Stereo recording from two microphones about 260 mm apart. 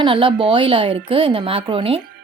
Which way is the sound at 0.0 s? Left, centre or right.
Centre.